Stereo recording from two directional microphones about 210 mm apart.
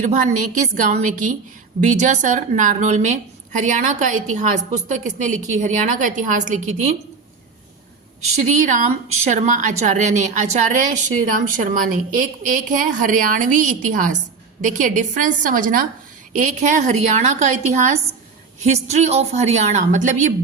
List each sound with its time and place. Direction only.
0.0 s a woman's voice: 35° right (ahead or behind)
8.4 s a woman's voice: 35° right (ahead or behind)